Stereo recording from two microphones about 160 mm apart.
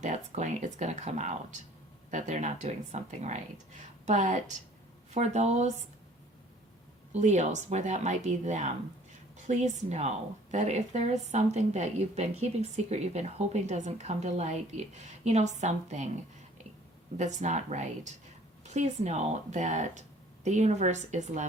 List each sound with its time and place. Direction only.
0.0 s speech: 50° right (ahead or behind)
7.1 s speech: 45° right (ahead or behind)
17.2 s speech: 45° right (ahead or behind)